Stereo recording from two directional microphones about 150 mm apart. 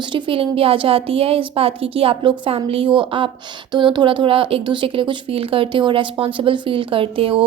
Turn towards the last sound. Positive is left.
turn(degrees=-35)  # may be behind; listen again after turning